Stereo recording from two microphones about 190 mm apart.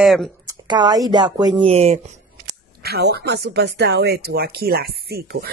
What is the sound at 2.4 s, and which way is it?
Speech, 55° right (ahead or behind).